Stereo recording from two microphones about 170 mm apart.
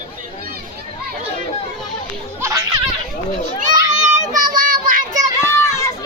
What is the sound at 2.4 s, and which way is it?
Children playing, 20° right (ahead or behind).